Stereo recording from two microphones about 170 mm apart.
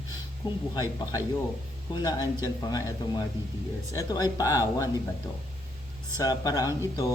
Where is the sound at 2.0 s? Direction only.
20° left (ahead or behind).